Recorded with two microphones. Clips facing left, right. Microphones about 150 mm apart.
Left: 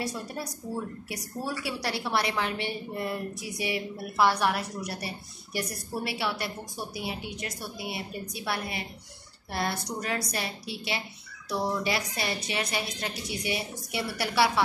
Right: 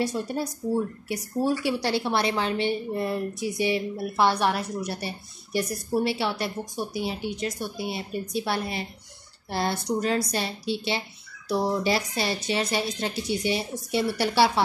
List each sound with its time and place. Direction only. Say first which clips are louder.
0.0 s a woman's voice: right 7 dB; 25° right (ahead or behind)